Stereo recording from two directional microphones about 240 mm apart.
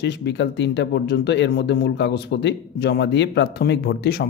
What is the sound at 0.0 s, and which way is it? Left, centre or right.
Speech, left.